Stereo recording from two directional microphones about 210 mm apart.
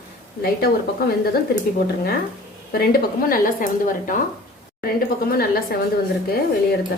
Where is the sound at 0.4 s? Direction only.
45° left (ahead or behind).